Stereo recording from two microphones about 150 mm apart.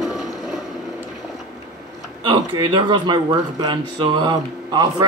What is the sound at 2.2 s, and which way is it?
A man's voice, 30° right (ahead or behind).